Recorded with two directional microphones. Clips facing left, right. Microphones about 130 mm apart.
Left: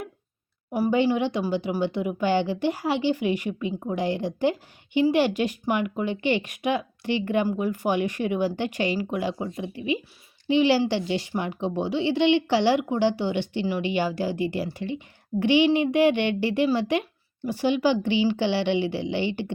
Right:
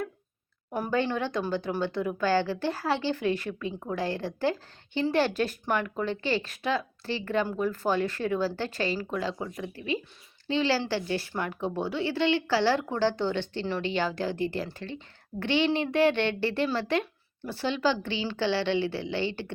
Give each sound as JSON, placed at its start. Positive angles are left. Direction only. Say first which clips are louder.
{"t": 0.7, "sound": "a woman's voice", "louder": "left 6 dB", "side_deg": 10}
{"t": 9.4, "sound": "speech", "louder": "left 4 dB", "side_deg": 25}
{"t": 9.7, "sound": "a woman's voice", "louder": "left 4 dB", "side_deg": 15}